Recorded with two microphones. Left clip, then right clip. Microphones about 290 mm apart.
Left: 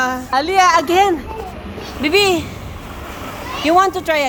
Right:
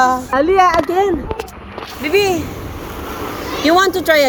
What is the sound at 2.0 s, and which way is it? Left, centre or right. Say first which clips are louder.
Speech: left 1 dB; left.